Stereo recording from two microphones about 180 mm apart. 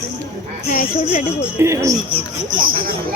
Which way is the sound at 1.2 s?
15° right (ahead or behind).